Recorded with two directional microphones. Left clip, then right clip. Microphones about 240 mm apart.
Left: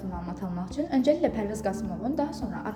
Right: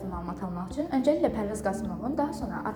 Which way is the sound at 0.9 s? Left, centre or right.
Centre.